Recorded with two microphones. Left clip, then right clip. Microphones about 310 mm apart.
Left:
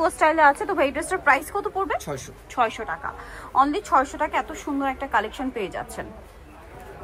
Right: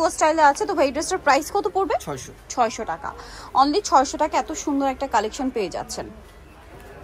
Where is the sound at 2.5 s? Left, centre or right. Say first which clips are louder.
Right 1 dB; centre.